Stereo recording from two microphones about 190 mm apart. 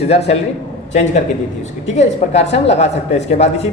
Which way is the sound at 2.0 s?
35° left (ahead or behind).